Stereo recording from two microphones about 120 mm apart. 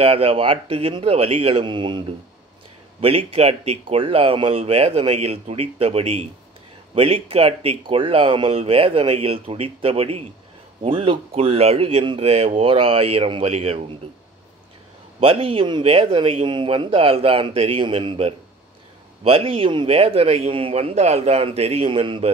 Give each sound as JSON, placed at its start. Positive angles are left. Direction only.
{"t": 0.0, "sound": "speech", "side_deg": -55}
{"t": 3.0, "sound": "speech", "side_deg": -55}
{"t": 15.1, "sound": "speech", "side_deg": -50}